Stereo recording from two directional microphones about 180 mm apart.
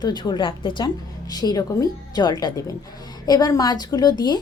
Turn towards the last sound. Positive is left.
turn(degrees=25)  # may be behind; listen again after turning